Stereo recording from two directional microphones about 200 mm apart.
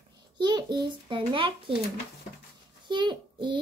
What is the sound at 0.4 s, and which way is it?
A child's voice, 20° right (ahead or behind).